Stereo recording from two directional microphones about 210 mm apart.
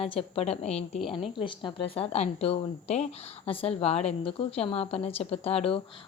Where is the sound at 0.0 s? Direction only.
25° left (ahead or behind).